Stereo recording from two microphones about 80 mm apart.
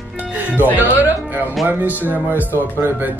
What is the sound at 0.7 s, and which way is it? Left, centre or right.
Speech, right.